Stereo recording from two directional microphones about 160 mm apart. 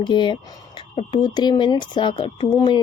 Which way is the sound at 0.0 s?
30° left (ahead or behind).